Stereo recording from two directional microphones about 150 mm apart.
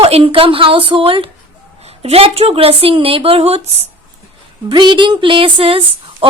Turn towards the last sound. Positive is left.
turn(degrees=-40)  # may be behind; listen again after turning